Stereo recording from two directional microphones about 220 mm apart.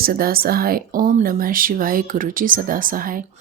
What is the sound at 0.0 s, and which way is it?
Speech, 40° right (ahead or behind).